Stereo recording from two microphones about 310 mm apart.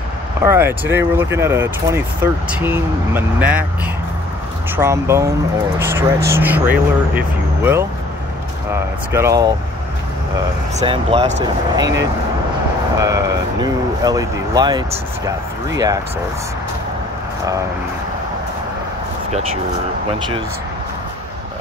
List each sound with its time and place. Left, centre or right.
0.4 s speech: centre
4.7 s speech: centre
9.1 s speech: centre
10.8 s speech: centre
13.0 s speech: centre